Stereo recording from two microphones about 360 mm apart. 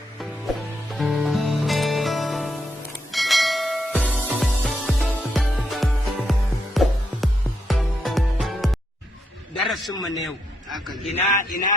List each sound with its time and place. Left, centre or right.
0.9 s music: centre
3.1 s bell: centre
6.8 s music: centre
9.6 s a man's voice: centre
11.1 s speech: centre